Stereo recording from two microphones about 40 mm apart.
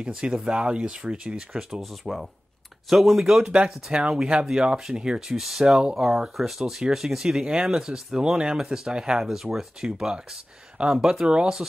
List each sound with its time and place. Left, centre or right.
0.0 s speech: right
1.8 s speech: centre
3.3 s speech: right
5.4 s speech: centre
9.3 s speech: centre